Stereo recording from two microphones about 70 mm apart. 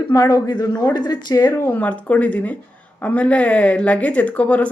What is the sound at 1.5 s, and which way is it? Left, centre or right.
Speech, left.